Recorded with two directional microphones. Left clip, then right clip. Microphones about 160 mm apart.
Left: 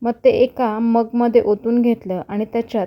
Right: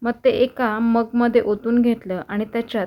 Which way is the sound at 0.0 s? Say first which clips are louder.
Left 3 dB; 40° left (ahead or behind).